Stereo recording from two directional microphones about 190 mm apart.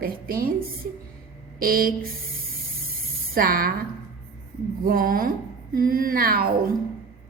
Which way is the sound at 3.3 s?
50° right (ahead or behind).